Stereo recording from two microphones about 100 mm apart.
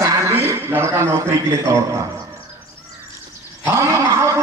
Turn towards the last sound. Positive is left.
turn(degrees=-30)  # may be behind; listen again after turning